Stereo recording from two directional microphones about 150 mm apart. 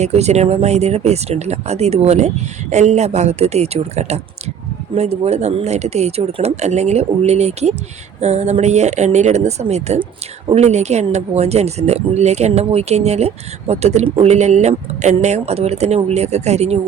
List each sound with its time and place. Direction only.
0.0 s speech: 45° right (ahead or behind)